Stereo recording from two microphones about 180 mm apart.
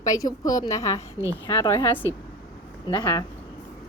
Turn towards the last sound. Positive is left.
turn(degrees=20)  # may be behind; listen again after turning